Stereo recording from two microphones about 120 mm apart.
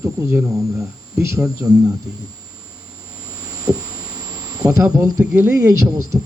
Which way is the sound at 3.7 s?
30° right (ahead or behind).